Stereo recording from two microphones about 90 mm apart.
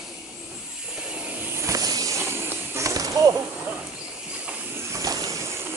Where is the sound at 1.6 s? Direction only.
40° right (ahead or behind).